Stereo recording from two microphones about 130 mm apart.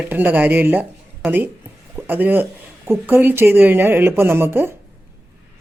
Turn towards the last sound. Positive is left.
turn(degrees=-15)  # may be behind; listen again after turning